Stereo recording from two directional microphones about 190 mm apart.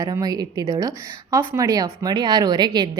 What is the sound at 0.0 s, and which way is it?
Speech, 20° right (ahead or behind).